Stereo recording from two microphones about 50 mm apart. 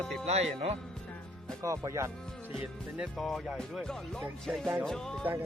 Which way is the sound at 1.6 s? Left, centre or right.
Right.